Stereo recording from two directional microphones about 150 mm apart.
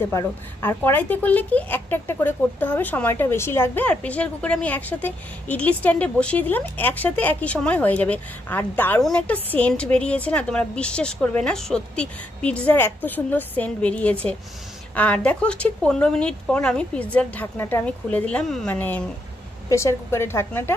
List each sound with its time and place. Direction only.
0.0 s a woman's voice: 15° left (ahead or behind)